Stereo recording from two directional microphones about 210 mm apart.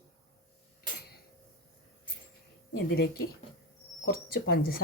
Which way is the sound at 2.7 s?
50° left (ahead or behind).